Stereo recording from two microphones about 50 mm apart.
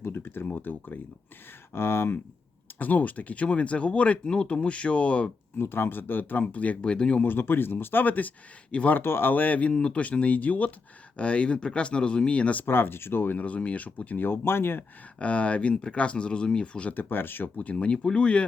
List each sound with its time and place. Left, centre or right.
0.0 s speech: left
1.7 s speech: left
2.7 s speech: left
5.5 s speech: left
6.4 s speech: left
7.2 s speech: left
9.0 s speech: left
9.7 s speech: centre
12.6 s speech: left
13.3 s speech: left
14.3 s speech: left
15.2 s speech: left
16.9 s speech: left
17.7 s speech: left